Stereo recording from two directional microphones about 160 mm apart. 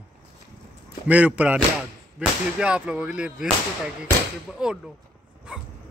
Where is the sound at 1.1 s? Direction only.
10° right (ahead or behind).